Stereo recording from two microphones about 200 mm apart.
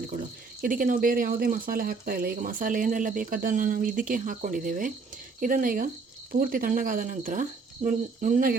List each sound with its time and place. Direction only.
0.6 s speech: 45° right (ahead or behind)